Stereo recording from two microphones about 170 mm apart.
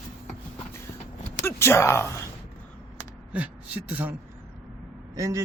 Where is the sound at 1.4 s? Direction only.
15° left (ahead or behind).